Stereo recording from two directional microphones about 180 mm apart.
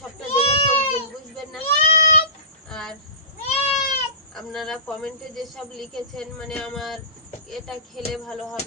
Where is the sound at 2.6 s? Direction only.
5° left (ahead or behind).